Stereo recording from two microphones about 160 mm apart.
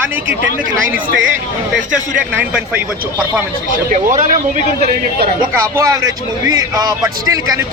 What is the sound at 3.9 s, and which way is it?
Speech, 55° right (ahead or behind).